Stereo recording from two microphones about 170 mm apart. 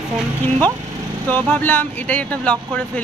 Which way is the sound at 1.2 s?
10° left (ahead or behind).